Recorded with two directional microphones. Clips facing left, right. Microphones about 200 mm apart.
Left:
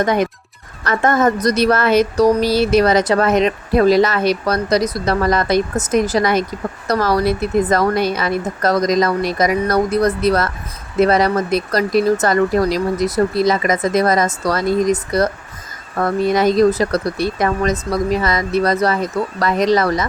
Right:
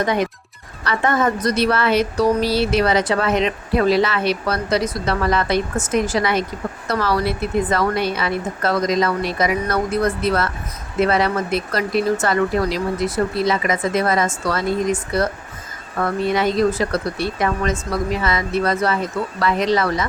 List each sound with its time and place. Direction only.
0.0 s a woman's voice: 45° left (ahead or behind)